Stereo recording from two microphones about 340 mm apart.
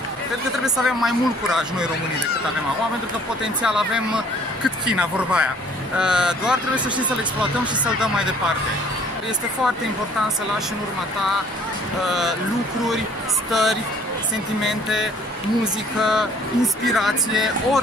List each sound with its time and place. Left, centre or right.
0.8 s speech: centre
3.6 s speech: centre
13.5 s speech: centre